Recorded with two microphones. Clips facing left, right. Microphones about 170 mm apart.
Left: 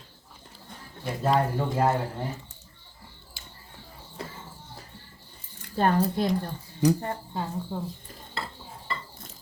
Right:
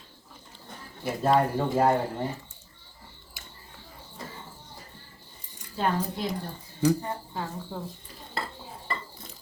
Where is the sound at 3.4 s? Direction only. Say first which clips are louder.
Right 1 dB; 30° left (ahead or behind).